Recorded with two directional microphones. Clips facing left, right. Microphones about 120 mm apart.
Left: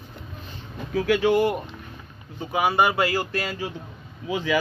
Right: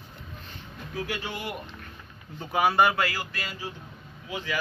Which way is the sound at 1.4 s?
30° left (ahead or behind).